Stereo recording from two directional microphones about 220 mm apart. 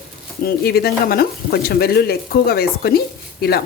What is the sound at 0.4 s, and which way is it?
Speech, 45° left (ahead or behind).